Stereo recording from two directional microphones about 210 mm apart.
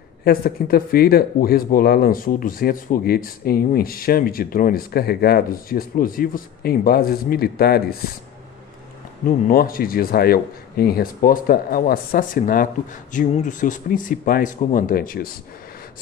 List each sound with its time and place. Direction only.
0.2 s speech: 45° left (ahead or behind)
9.2 s speech: 45° left (ahead or behind)